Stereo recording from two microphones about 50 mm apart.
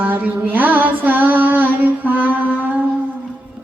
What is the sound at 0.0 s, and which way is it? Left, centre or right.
Mantra, right.